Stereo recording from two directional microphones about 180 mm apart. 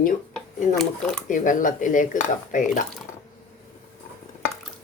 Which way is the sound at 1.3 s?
45° left (ahead or behind).